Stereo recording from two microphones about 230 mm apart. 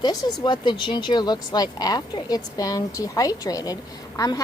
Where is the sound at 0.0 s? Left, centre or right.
Centre.